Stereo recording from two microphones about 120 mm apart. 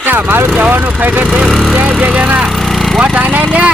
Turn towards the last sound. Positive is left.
turn(degrees=-15)  # may be behind; listen again after turning